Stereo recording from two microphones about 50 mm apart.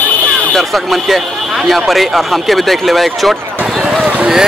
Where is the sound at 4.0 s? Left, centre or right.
Right.